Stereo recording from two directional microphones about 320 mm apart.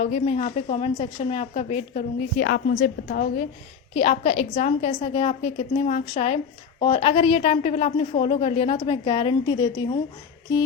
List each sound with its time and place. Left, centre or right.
0.0 s a woman's voice: left
2.4 s a woman's voice: left; by 10.0 s centre